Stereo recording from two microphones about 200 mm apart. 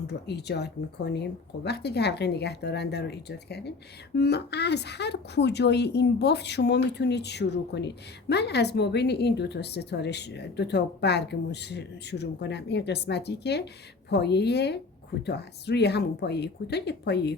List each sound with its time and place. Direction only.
0.1 s speech: 55° left (ahead or behind)